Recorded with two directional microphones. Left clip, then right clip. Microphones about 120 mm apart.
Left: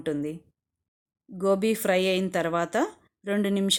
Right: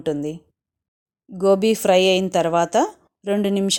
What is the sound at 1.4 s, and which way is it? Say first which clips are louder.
Speech: right 7 dB; 30° right (ahead or behind).